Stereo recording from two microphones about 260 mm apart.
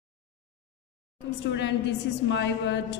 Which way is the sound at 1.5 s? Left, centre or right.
Left.